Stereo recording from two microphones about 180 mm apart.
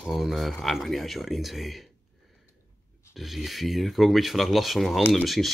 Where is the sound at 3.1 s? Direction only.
Centre (ahead or behind).